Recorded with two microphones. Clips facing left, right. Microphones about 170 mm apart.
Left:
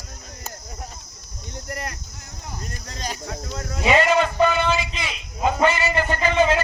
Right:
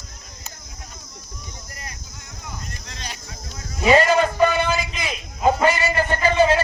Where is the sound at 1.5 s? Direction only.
65° left (ahead or behind).